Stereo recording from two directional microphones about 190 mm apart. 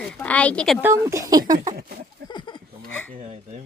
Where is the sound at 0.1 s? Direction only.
5° left (ahead or behind).